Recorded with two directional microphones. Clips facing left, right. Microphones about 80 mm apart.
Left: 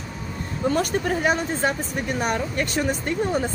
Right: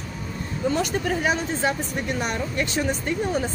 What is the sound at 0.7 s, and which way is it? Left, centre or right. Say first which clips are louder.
Speech: left 2 dB; left.